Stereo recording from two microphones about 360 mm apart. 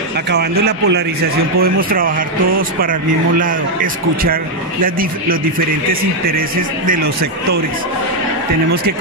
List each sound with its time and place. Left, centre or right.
0.3 s a man's voice: right